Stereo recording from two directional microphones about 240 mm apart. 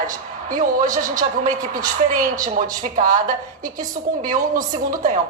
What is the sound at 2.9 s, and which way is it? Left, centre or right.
Speech, right.